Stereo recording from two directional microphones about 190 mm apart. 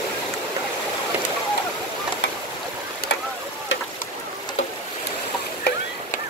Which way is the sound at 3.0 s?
55° left (ahead or behind).